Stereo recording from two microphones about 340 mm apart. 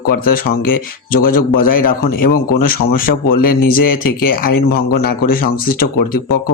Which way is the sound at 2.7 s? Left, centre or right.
Left.